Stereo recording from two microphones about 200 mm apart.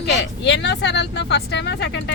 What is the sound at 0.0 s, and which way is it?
Speech, 60° left (ahead or behind).